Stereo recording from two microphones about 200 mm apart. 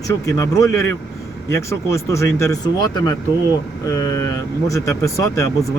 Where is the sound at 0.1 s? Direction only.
15° left (ahead or behind).